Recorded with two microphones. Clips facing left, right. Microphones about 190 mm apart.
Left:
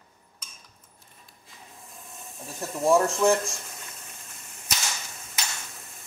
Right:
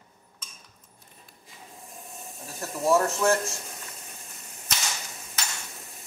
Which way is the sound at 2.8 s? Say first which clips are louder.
Left 2 dB; 15° left (ahead or behind).